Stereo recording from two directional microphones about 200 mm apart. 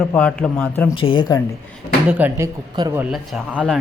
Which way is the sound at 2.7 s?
20° right (ahead or behind).